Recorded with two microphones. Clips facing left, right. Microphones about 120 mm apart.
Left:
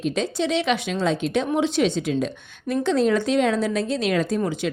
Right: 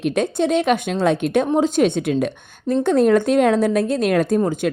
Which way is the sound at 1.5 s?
45° right (ahead or behind).